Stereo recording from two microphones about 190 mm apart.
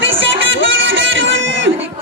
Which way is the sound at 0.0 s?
80° right.